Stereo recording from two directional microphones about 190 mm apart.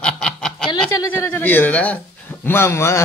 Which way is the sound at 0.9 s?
15° left (ahead or behind).